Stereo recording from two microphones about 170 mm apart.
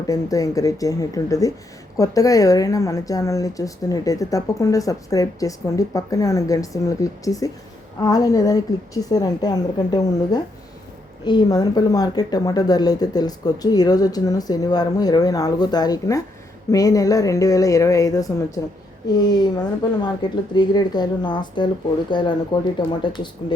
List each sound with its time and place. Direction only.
0.1 s a woman's voice: 20° left (ahead or behind)